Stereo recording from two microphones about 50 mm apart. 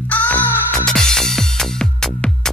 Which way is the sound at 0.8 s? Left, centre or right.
Centre.